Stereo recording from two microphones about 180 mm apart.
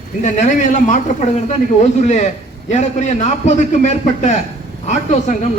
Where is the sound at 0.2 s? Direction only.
40° left (ahead or behind).